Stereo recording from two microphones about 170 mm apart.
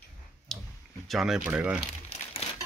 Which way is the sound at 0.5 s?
5° left (ahead or behind).